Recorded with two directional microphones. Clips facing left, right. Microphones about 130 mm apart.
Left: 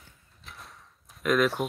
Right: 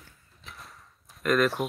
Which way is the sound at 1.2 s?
Centre (ahead or behind).